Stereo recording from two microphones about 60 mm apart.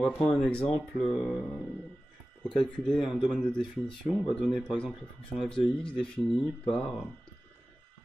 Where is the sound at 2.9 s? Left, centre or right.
Centre.